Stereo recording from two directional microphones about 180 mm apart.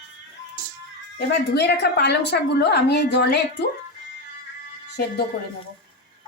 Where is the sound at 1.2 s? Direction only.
70° left (ahead or behind).